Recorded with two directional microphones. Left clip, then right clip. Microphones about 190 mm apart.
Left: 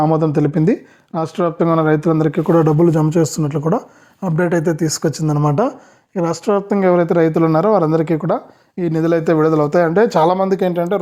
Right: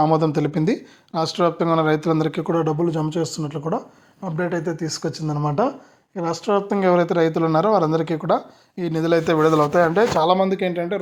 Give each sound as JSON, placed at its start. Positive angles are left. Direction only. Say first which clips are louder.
{"t": 0.0, "sound": "speech", "louder": "left 3 dB", "side_deg": 30}